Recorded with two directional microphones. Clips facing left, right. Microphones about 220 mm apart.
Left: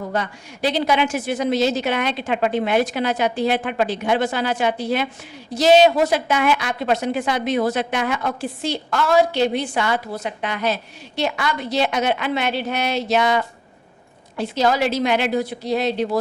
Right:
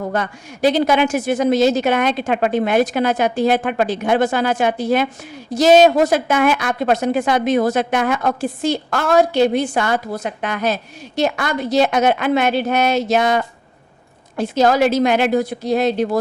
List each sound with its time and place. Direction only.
0.1 s a woman's voice: 50° right (ahead or behind)